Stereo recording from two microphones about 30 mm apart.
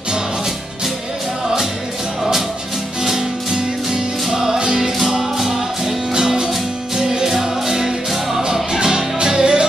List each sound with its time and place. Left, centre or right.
3.9 s music: centre
6.1 s music: right
8.7 s music: right